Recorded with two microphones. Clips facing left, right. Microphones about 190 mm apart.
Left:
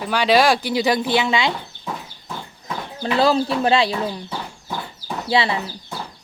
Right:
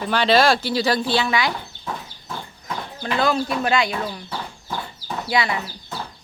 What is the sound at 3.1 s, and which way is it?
Speech, 30° left (ahead or behind).